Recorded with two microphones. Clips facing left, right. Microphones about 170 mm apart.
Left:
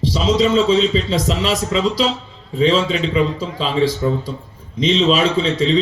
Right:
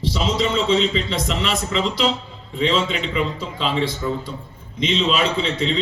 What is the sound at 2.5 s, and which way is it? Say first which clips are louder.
Speech: left 5 dB; 35° left (ahead or behind).